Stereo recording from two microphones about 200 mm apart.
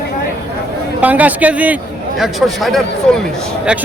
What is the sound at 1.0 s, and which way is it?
Speech, 10° right (ahead or behind).